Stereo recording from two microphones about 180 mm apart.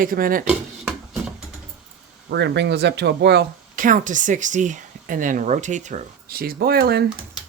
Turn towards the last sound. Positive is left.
turn(degrees=-60)  # may be behind; listen again after turning